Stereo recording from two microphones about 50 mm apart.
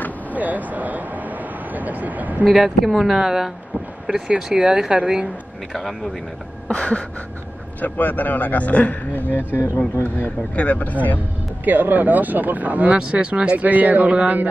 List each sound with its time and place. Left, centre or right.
0.3 s speech: right
2.5 s speech: centre
4.1 s speech: right
5.7 s speech: centre
6.7 s a sound: left
7.8 s a man's voice: left
10.5 s a man's voice: left
11.6 s speech: right
12.9 s speech: right